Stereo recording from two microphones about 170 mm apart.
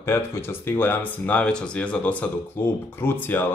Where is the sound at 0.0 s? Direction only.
15° left (ahead or behind).